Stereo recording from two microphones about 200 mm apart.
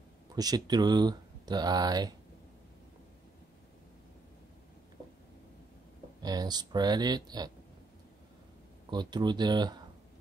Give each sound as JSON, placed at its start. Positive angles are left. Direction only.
{"t": 0.4, "sound": "speech", "side_deg": -20}
{"t": 6.2, "sound": "speech", "side_deg": -20}
{"t": 8.9, "sound": "speech", "side_deg": -20}